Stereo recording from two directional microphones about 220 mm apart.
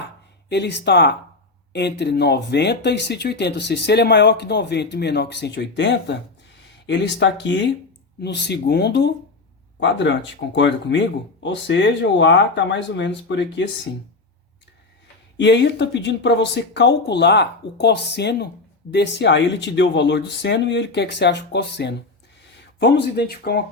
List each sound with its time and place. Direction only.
0.5 s speech: 50° left (ahead or behind)
15.4 s speech: 50° left (ahead or behind)